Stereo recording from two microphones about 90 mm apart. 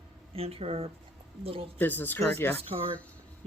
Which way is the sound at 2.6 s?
90° right.